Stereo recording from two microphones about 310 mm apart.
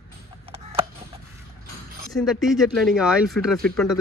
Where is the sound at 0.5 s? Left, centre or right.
Centre.